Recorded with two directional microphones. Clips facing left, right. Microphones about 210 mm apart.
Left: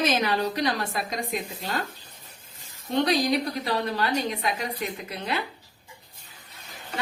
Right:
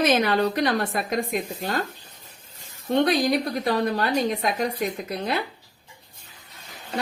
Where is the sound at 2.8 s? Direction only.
55° right (ahead or behind).